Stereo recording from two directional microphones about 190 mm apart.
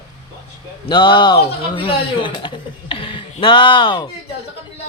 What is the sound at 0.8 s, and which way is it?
Speech, 25° left (ahead or behind).